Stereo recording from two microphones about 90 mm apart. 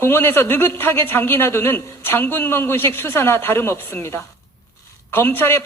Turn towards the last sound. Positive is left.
turn(degrees=25)  # may be behind; listen again after turning